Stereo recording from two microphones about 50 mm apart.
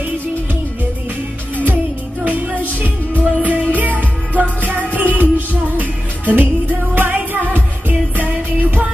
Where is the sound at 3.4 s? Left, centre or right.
Right.